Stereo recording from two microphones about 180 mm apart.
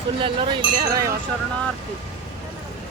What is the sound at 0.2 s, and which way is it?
Speech, 25° right (ahead or behind).